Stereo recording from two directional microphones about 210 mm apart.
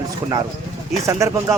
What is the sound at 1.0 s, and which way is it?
Speech, 15° right (ahead or behind).